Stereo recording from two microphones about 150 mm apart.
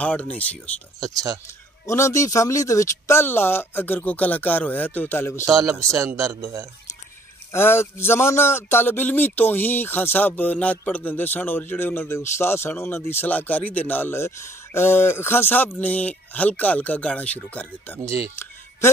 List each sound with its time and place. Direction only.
0.0 s speech: 10° left (ahead or behind)
1.9 s speech: 20° left (ahead or behind)
5.6 s speech: 25° right (ahead or behind)
7.5 s speech: 15° left (ahead or behind)